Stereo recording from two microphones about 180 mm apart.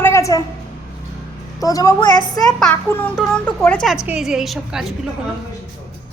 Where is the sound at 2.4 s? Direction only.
5° left (ahead or behind).